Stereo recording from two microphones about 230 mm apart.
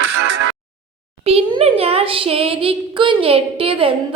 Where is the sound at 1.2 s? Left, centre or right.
Right.